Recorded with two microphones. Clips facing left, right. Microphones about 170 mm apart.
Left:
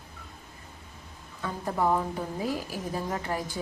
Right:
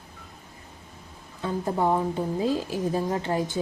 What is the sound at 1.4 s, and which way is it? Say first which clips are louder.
Speech: right 4 dB; 25° right (ahead or behind).